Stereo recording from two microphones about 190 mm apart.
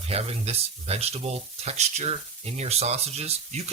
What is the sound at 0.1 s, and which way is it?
Speech, 30° right (ahead or behind).